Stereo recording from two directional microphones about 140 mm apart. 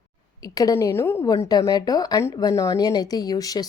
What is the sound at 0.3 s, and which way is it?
A woman's voice, 25° left (ahead or behind).